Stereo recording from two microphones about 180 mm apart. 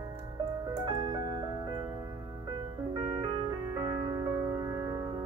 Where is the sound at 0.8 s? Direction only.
20° right (ahead or behind).